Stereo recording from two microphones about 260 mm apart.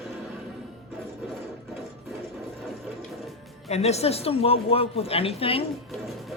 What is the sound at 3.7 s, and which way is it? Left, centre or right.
Speech, left.